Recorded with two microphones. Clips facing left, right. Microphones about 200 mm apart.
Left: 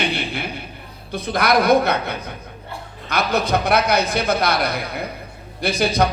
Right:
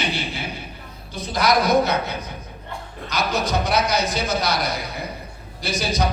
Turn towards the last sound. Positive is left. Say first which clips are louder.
# left 5 dB
turn(degrees=55)  # may be behind; listen again after turning